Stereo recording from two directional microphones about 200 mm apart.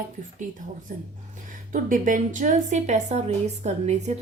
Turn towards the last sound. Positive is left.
turn(degrees=-35)  # may be behind; listen again after turning